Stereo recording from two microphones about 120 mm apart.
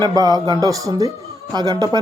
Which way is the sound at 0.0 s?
30° right (ahead or behind).